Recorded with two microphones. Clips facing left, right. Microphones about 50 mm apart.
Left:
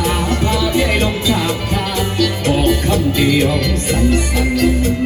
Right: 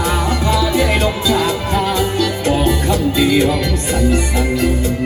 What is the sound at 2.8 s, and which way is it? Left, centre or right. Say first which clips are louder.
Music: even; left.